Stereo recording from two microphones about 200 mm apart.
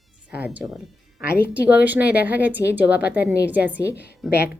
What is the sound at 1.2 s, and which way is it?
Speech, 50° left (ahead or behind).